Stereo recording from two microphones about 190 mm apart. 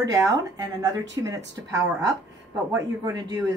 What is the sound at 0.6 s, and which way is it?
A woman's voice, 20° right (ahead or behind).